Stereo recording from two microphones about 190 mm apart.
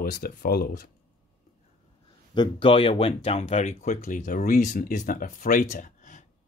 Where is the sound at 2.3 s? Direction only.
25° left (ahead or behind).